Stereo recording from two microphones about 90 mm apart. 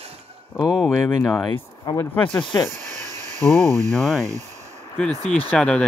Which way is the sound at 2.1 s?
20° left (ahead or behind).